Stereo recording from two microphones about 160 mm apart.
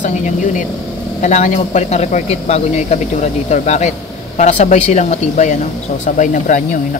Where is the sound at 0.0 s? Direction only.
50° left (ahead or behind).